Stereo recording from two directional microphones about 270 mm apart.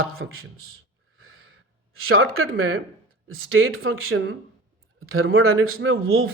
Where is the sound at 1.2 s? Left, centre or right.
Right.